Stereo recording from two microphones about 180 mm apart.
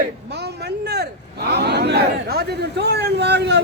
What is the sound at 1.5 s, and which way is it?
Speech, 65° right (ahead or behind).